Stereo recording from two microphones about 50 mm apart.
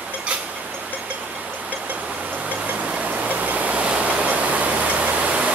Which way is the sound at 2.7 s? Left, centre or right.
Right.